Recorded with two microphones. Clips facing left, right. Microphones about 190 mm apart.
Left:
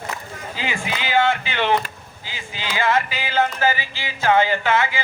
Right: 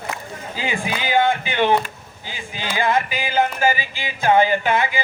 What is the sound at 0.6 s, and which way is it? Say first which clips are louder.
Speech: right 2 dB; 15° right (ahead or behind).